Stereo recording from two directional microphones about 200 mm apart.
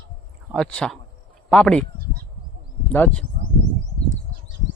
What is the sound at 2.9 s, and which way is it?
Speech, 5° left (ahead or behind).